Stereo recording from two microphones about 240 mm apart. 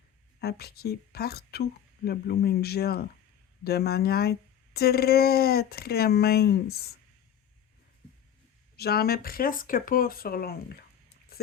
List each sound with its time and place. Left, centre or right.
0.3 s speech: left
8.7 s speech: left
11.3 s a sound: left